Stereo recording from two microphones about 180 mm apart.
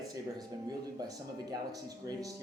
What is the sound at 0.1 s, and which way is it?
Speech, 20° right (ahead or behind).